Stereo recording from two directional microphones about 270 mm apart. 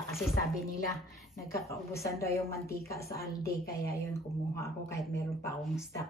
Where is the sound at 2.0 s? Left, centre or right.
Left.